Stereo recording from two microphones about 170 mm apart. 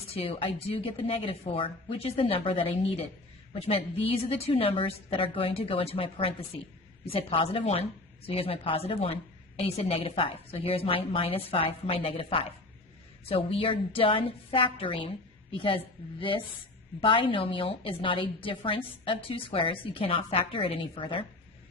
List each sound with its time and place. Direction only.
0.1 s a woman's voice: 35° left (ahead or behind)
17.0 s a woman's voice: 30° left (ahead or behind)